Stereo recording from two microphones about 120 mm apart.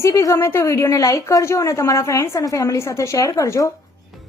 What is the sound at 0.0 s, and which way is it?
A woman's voice, 30° left (ahead or behind).